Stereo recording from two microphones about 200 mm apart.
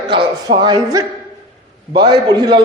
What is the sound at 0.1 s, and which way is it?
A man's voice, 25° right (ahead or behind).